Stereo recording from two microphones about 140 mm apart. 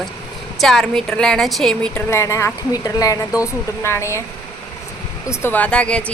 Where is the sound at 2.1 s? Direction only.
20° left (ahead or behind).